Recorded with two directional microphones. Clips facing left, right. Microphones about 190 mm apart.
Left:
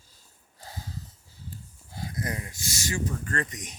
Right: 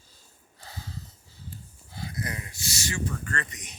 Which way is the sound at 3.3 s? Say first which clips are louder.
Left 3 dB; 40° left (ahead or behind).